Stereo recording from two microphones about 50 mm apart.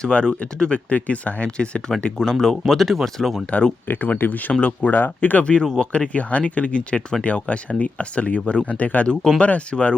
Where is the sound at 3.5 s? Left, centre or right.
Left.